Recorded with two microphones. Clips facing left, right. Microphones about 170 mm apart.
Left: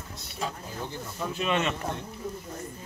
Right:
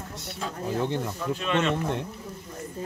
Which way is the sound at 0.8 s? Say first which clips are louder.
Right 12 dB; 70° right (ahead or behind).